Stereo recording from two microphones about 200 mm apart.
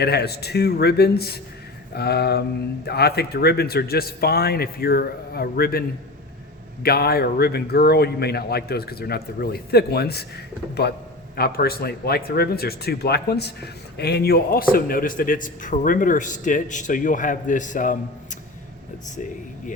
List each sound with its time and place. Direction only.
0.0 s speech: 55° left (ahead or behind)
6.8 s a man's voice: 50° left (ahead or behind)